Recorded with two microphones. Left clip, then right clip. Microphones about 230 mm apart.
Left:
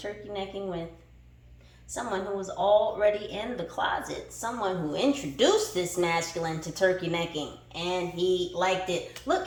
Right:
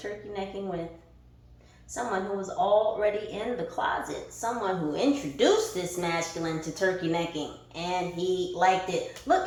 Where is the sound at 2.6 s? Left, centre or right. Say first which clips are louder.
Left 1 dB; left.